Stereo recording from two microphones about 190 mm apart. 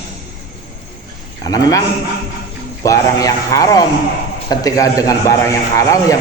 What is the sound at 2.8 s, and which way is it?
A man's voice, 20° left (ahead or behind).